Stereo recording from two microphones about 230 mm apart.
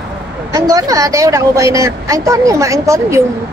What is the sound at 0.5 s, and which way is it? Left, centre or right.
A woman's voice, centre.